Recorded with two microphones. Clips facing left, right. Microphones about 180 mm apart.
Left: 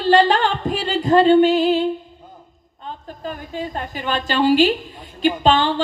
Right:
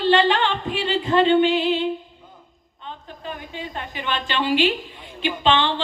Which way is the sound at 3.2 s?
40° left (ahead or behind).